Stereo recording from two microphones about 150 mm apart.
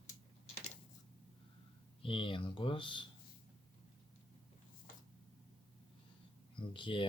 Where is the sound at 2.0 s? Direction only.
35° left (ahead or behind).